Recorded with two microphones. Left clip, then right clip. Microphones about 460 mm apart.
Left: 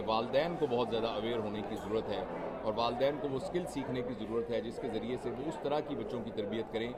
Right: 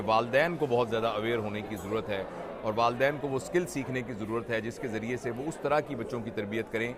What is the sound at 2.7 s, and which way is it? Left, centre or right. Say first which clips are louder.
Speech: right 6 dB; right.